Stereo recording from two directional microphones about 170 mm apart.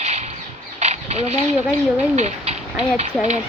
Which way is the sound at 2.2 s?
40° right (ahead or behind).